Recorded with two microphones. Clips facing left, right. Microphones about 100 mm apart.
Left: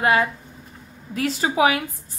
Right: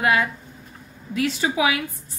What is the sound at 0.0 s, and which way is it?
A woman's voice, 30° left (ahead or behind).